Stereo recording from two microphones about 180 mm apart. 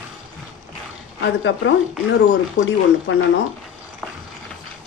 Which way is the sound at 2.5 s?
90° left.